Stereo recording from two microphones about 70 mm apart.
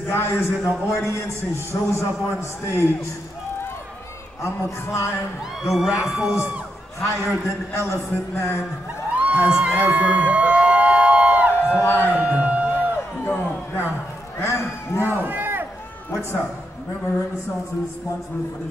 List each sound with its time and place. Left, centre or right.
0.1 s a man's voice: left
4.4 s a man's voice: left
5.6 s speech: centre
7.4 s a man's voice: left
9.2 s speech: centre
9.8 s crowd: centre
11.5 s a sound: left
12.2 s music: centre
13.2 s a sound: left
14.4 s a man's voice: left
15.0 s speech: right
16.1 s a man's voice: left